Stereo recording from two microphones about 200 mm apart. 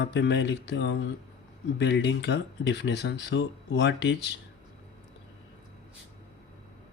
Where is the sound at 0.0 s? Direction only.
60° left (ahead or behind).